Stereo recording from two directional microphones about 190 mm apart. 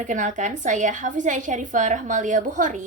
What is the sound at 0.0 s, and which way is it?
A woman's voice, 40° right (ahead or behind).